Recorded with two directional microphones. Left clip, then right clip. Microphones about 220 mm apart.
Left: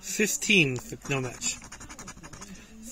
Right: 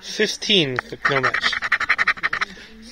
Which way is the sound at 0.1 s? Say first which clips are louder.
Right 5 dB; 40° left (ahead or behind).